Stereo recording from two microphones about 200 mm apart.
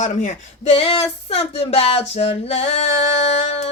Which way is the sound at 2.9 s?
65° left (ahead or behind).